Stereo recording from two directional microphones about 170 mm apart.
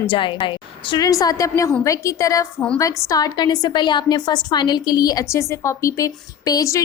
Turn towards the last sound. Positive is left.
turn(degrees=20)  # may be behind; listen again after turning